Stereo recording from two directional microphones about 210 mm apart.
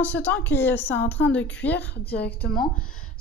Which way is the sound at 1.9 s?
50° left (ahead or behind).